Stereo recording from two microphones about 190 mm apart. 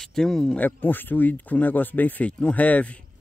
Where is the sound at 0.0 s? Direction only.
Centre (ahead or behind).